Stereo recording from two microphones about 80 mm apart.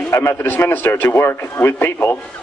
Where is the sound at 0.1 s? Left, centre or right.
Left.